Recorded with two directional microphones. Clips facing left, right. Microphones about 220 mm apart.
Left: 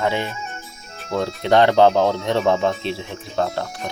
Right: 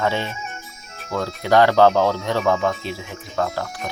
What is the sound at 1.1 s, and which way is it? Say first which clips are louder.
Speech: left 1 dB; 25° left (ahead or behind).